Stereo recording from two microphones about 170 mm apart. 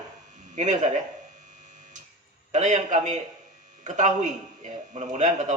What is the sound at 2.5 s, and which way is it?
A man's voice, 45° right (ahead or behind).